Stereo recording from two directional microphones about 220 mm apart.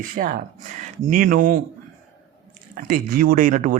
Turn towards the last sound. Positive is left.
turn(degrees=-35)  # may be behind; listen again after turning